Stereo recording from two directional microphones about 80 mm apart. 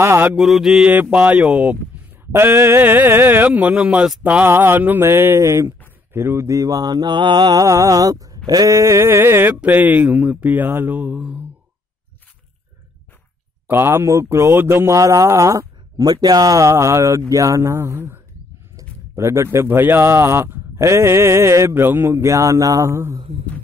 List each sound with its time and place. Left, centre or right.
0.0 s a man's voice: right
0.4 s mantra: centre
1.1 s speech: centre
2.3 s speech: right
7.6 s mantra: right
8.5 s speech: right; by 11.4 s centre
13.7 s a man's voice: right
16.1 s a man's voice: right